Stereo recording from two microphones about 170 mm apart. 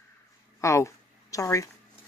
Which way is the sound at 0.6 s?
15° left (ahead or behind).